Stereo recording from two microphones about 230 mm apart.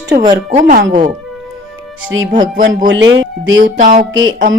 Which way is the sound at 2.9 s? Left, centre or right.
Right.